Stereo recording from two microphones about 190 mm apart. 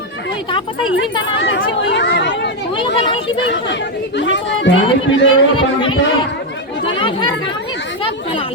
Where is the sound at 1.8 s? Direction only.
70° left (ahead or behind).